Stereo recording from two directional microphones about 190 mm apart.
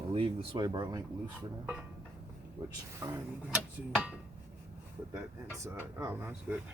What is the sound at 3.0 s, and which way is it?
Speech, 15° right (ahead or behind).